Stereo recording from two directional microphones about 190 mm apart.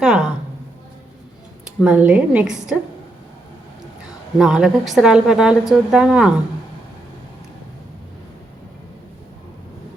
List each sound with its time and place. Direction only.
0.0 s a sound: centre (ahead or behind)
1.8 s a woman's voice: 5° right (ahead or behind)
4.4 s a woman's voice: 5° right (ahead or behind)